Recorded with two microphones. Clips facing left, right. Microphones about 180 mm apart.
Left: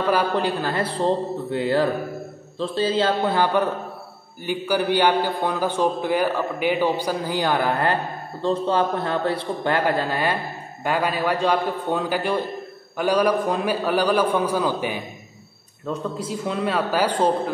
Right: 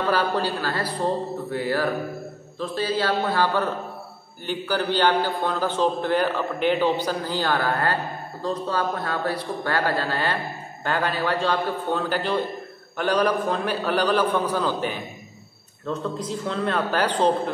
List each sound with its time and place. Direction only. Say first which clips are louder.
0.1 s a man's voice: left 3 dB; 20° left (ahead or behind)